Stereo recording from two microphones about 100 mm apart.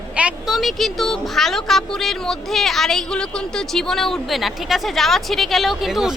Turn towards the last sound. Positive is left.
turn(degrees=-5)  # may be behind; listen again after turning